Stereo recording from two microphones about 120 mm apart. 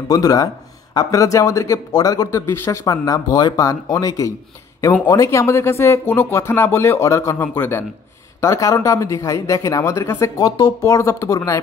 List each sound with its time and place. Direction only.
0.1 s speech: 30° left (ahead or behind)
2.4 s speech: 20° left (ahead or behind)